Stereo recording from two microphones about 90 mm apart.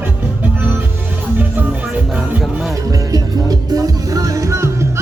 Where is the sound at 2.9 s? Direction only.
45° right (ahead or behind).